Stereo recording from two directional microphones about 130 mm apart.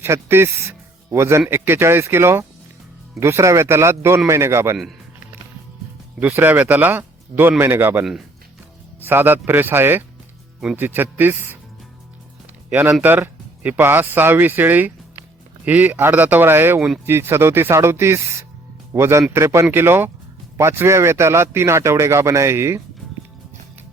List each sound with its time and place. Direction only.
0.0 s speech: 20° right (ahead or behind)
6.1 s speech: 15° right (ahead or behind)
12.7 s speech: 15° right (ahead or behind)